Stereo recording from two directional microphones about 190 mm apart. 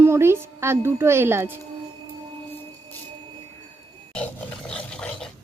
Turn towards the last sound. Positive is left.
turn(degrees=5)  # may be behind; listen again after turning